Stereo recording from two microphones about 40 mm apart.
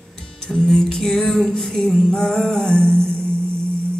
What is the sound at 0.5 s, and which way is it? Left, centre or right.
Music, centre.